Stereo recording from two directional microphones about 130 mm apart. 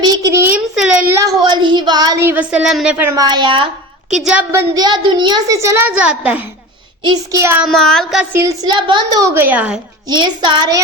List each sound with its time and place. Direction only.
0.0 s a child's voice: 30° right (ahead or behind)
1.0 s child singing: 20° right (ahead or behind)
2.2 s a woman's voice: 10° right (ahead or behind)
3.2 s a child's voice: 35° right (ahead or behind)
5.6 s a child's voice: 20° right (ahead or behind)
7.0 s a child's voice: 30° right (ahead or behind)
7.6 s child singing: 5° left (ahead or behind)
8.2 s a child's voice: 20° right (ahead or behind)
8.6 s a child's voice: 35° right (ahead or behind)
9.3 s a woman's voice: 15° right (ahead or behind)
10.1 s a child's voice: 35° right (ahead or behind)